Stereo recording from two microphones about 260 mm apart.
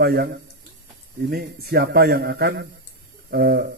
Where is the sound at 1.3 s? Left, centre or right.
Right.